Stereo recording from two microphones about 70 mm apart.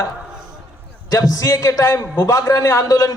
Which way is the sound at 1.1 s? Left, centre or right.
Left.